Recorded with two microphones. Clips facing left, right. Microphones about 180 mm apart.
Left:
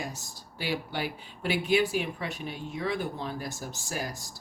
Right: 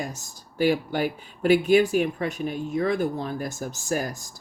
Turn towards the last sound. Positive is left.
turn(degrees=-45)  # may be behind; listen again after turning